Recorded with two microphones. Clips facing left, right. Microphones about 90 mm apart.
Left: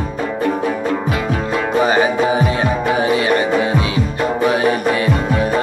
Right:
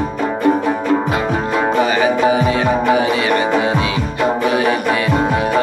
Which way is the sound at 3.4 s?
30° right (ahead or behind).